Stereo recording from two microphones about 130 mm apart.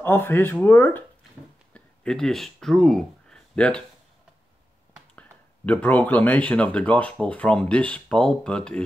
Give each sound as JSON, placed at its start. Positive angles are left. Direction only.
{"t": 0.0, "sound": "speech", "side_deg": 15}
{"t": 1.7, "sound": "speech", "side_deg": 5}
{"t": 5.7, "sound": "speech", "side_deg": 10}